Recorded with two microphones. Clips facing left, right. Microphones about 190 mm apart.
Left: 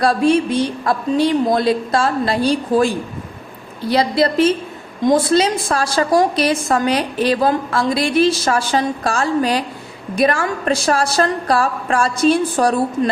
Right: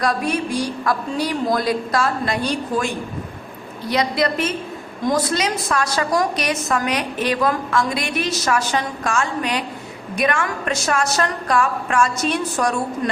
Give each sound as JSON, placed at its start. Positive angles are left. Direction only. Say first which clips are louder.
{"t": 0.0, "sound": "a woman's voice", "louder": "left 7 dB", "side_deg": 30}